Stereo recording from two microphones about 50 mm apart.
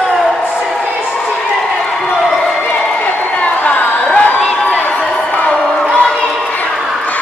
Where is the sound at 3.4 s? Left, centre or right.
Left.